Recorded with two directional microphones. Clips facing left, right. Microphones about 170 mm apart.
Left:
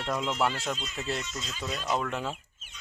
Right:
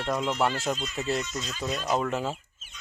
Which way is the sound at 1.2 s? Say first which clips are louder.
Right 4 dB; 25° left (ahead or behind).